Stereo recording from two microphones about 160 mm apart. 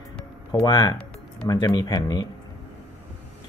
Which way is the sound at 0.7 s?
25° left (ahead or behind).